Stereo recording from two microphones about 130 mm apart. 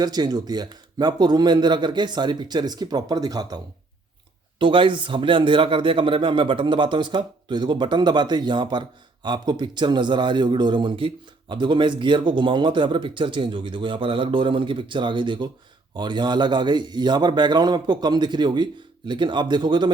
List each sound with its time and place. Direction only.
0.0 s a man's voice: 30° right (ahead or behind)
4.6 s a man's voice: 40° right (ahead or behind)